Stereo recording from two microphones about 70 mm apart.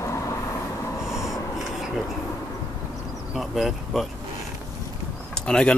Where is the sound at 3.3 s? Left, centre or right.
Centre.